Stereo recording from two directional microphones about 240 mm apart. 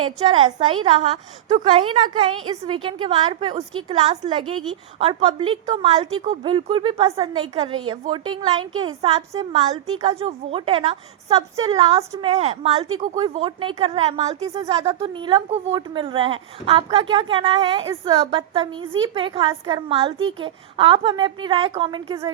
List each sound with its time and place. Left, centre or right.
0.0 s a woman's voice: right
12.3 s speech: right